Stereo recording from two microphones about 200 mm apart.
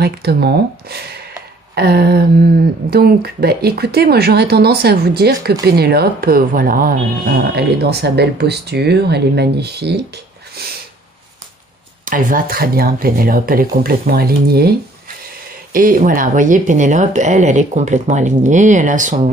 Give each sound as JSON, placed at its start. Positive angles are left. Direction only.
{"t": 0.0, "sound": "speech", "side_deg": -50}
{"t": 12.0, "sound": "speech", "side_deg": -45}